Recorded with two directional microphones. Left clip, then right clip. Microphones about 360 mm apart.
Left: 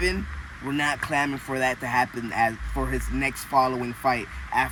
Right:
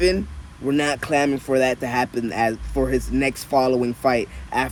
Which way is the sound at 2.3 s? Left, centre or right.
Centre.